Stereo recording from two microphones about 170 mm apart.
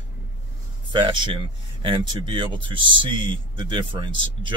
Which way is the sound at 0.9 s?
30° right (ahead or behind).